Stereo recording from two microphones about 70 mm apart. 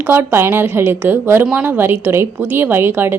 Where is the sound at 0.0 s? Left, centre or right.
Right.